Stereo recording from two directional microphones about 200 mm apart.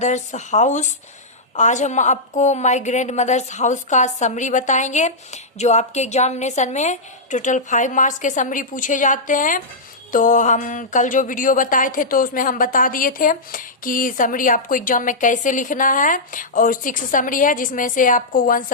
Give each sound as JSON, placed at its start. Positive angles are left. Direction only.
{"t": 0.0, "sound": "speech", "side_deg": 35}